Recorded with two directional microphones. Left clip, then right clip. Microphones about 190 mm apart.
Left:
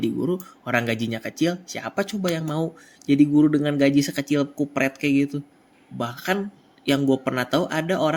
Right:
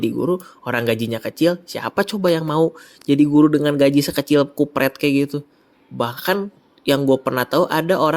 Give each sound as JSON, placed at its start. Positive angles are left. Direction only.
{"t": 0.0, "sound": "speech", "side_deg": -30}